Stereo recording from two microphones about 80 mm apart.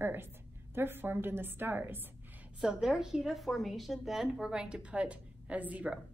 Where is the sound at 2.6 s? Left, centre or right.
Centre.